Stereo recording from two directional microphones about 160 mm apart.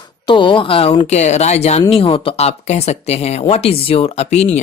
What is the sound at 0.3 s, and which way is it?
Speech, 30° left (ahead or behind).